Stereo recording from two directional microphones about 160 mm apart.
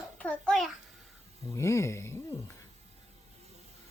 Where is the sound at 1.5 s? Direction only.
15° left (ahead or behind).